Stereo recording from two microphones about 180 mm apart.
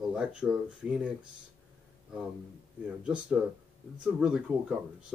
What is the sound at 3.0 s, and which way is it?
Speech, 5° right (ahead or behind).